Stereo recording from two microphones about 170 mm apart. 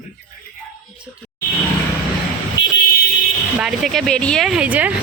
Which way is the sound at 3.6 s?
Centre (ahead or behind).